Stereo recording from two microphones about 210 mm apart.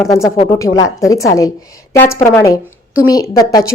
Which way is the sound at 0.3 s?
15° left (ahead or behind).